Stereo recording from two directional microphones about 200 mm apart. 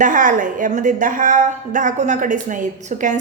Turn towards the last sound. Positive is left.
turn(degrees=-40)  # may be behind; listen again after turning